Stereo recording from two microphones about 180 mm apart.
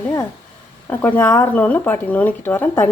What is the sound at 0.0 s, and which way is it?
A woman's voice, 15° left (ahead or behind).